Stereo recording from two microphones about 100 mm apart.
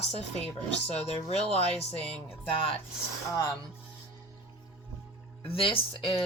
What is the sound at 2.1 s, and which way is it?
Speech, 70° left (ahead or behind).